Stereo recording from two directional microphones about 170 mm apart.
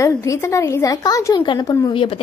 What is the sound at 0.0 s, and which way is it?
A woman's voice, 20° left (ahead or behind).